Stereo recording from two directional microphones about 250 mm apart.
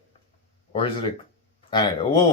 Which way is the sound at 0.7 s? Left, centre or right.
Centre.